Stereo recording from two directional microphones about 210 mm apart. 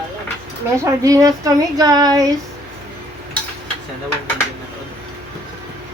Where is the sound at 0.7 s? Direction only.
15° right (ahead or behind).